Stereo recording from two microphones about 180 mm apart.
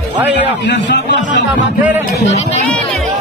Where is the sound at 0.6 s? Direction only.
75° left (ahead or behind).